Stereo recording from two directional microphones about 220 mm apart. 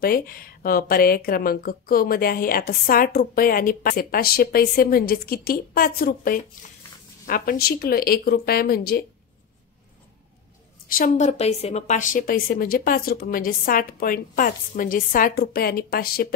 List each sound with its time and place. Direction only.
0.0 s speech: 40° left (ahead or behind)
10.9 s a woman's voice: 35° left (ahead or behind)